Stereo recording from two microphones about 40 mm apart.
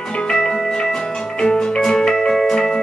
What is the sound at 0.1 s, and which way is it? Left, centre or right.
Music, left.